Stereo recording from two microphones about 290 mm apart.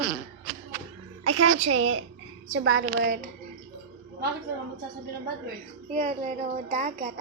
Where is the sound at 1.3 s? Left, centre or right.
Right.